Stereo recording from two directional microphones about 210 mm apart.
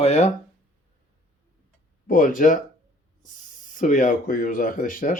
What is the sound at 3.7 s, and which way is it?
Speech, 40° left (ahead or behind).